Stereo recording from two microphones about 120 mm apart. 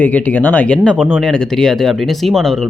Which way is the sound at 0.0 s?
15° left (ahead or behind).